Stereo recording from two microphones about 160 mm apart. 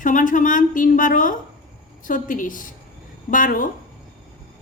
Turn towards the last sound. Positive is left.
turn(degrees=55)  # may be behind; listen again after turning